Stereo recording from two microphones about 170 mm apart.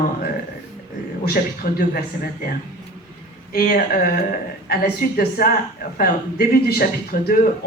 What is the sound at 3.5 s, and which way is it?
Speech, 60° left (ahead or behind).